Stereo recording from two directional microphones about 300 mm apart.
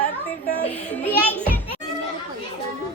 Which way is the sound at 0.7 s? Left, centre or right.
Centre.